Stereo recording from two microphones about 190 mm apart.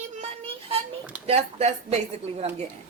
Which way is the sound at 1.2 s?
35° right (ahead or behind).